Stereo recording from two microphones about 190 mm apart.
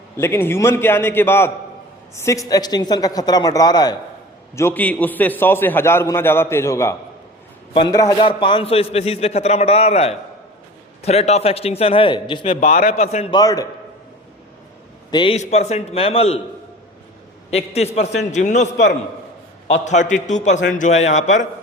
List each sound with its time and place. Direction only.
0.2 s a man's voice: 15° left (ahead or behind); by 13.2 s 35° left (ahead or behind)
13.3 s speech: 20° left (ahead or behind)
15.1 s a man's voice: 25° left (ahead or behind)
17.5 s a man's voice: 35° left (ahead or behind)